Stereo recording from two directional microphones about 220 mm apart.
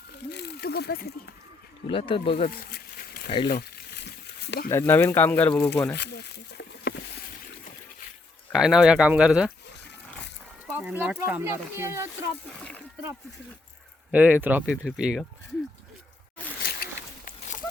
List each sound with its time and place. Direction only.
0.3 s a sound: 50° left (ahead or behind)
1.9 s speech: 25° left (ahead or behind)
2.5 s a sound: 45° left (ahead or behind)
3.2 s speech: 20° left (ahead or behind)
4.7 s speech: 10° left (ahead or behind)
6.0 s a sound: 50° left (ahead or behind)
8.5 s speech: 5° right (ahead or behind)
10.7 s speech: 10° right (ahead or behind)
14.1 s speech: 5° right (ahead or behind)